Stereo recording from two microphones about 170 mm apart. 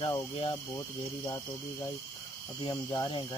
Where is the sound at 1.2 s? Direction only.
25° left (ahead or behind).